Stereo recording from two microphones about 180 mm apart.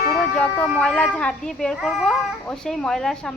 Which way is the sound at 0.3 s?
10° left (ahead or behind).